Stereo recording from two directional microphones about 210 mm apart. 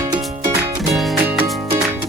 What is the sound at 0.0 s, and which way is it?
Music, 15° right (ahead or behind).